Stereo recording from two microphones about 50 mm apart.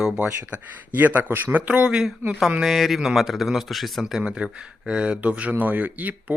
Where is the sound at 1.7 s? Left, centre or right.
Right.